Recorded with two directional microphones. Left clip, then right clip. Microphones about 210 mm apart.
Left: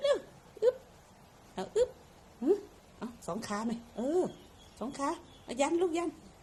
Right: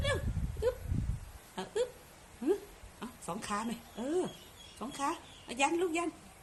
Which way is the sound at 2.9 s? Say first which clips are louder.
Left 2 dB; 20° right (ahead or behind).